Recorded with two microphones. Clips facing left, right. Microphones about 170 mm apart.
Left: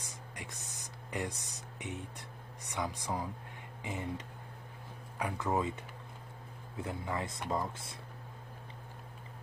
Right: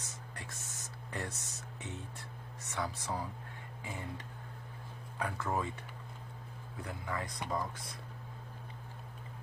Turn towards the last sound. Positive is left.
turn(degrees=25)  # may be behind; listen again after turning